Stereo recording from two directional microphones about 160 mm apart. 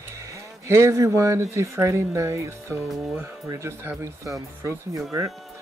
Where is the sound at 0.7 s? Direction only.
20° right (ahead or behind).